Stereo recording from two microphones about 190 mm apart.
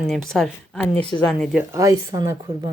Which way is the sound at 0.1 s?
Centre (ahead or behind).